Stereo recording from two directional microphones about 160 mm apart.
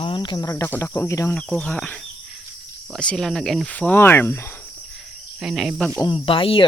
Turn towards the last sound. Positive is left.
turn(degrees=35)  # may be behind; listen again after turning